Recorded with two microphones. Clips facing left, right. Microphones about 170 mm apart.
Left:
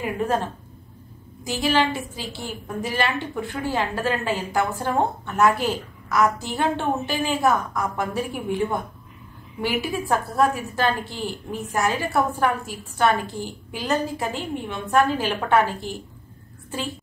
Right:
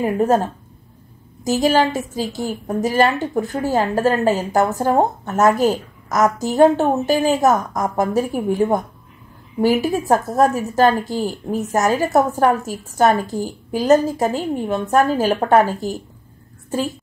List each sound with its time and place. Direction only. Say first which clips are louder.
0.0 s a woman's voice: right 7 dB; 40° right (ahead or behind)